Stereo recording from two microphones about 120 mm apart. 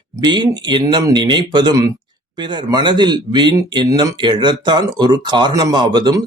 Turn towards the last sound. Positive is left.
turn(degrees=-35)  # may be behind; listen again after turning